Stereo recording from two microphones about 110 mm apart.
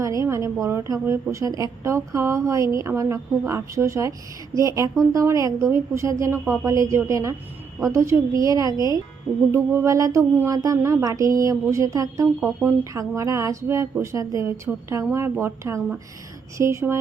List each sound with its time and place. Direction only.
0.0 s a woman's voice: 30° right (ahead or behind)